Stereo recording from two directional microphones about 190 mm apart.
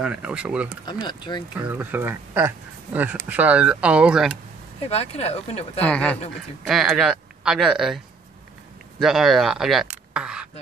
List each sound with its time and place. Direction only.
0.0 s speech: 5° right (ahead or behind)
1.0 s speech: 25° left (ahead or behind)
1.6 s speech: 10° right (ahead or behind)
4.8 s speech: 30° left (ahead or behind)
5.8 s speech: 5° left (ahead or behind)
9.0 s speech: centre (ahead or behind)